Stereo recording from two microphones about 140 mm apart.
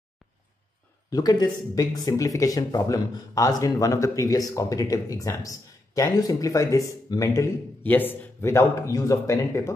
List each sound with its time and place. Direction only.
1.1 s speech: 30° left (ahead or behind)